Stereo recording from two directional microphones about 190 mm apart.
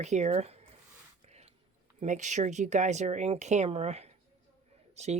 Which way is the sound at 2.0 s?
40° right (ahead or behind).